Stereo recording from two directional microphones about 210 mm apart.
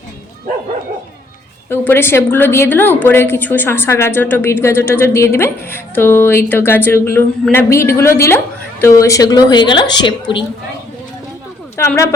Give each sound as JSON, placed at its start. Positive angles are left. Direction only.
{"t": 1.7, "sound": "a woman's voice", "side_deg": 10}
{"t": 11.8, "sound": "a woman's voice", "side_deg": 10}